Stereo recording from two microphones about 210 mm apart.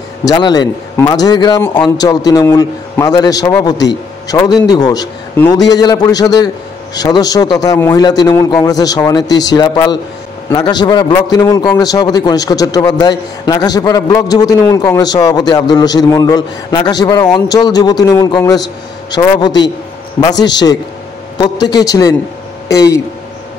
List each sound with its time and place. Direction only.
0.2 s a man's voice: 20° left (ahead or behind)